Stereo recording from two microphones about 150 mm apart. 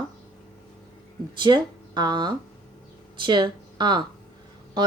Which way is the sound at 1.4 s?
30° right (ahead or behind).